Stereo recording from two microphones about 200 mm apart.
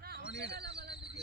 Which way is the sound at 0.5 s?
55° right (ahead or behind).